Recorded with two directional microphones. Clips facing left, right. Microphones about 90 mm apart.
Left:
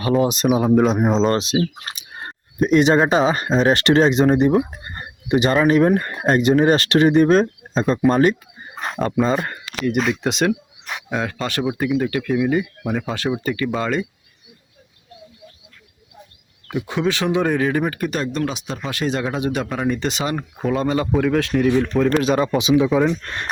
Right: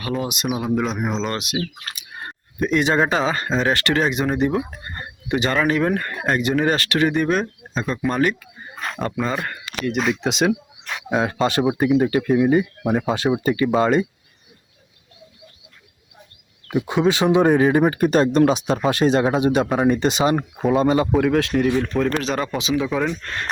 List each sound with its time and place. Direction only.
0.0 s speech: 30° left (ahead or behind)
5.6 s speech: 25° left (ahead or behind)
10.0 s a man's voice: centre (ahead or behind)
11.3 s speech: 20° right (ahead or behind)
12.5 s speech: 10° right (ahead or behind)
16.7 s speech: 15° right (ahead or behind)
20.0 s speech: 20° right (ahead or behind)
20.6 s a man's voice: 5° right (ahead or behind)
22.5 s speech: 15° left (ahead or behind)
22.9 s a man's voice: 5° left (ahead or behind)
23.2 s speech: 20° left (ahead or behind)